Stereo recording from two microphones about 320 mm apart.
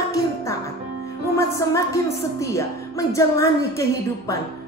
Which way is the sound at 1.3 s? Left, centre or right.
Centre.